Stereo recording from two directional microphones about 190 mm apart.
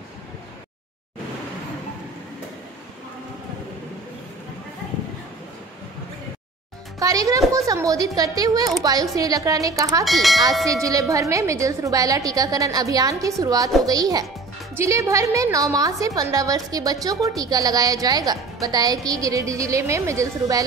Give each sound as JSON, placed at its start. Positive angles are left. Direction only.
{"t": 7.0, "sound": "a woman's voice", "side_deg": -20}
{"t": 10.0, "sound": "bell", "side_deg": 0}
{"t": 10.7, "sound": "a woman's voice", "side_deg": -15}